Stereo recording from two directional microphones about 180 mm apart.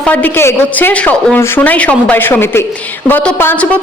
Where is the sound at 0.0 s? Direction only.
10° left (ahead or behind).